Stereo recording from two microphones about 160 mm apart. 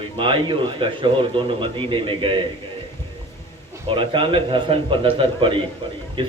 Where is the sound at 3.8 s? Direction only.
35° right (ahead or behind).